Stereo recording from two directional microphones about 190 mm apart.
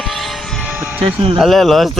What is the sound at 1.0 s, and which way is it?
Speech, 25° right (ahead or behind).